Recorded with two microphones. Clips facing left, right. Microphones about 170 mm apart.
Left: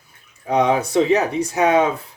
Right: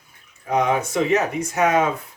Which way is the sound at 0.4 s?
30° left (ahead or behind).